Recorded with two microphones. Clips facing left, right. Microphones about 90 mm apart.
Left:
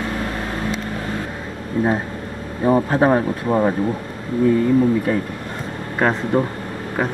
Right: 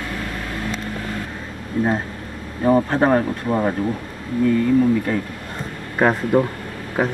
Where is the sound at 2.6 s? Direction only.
5° left (ahead or behind).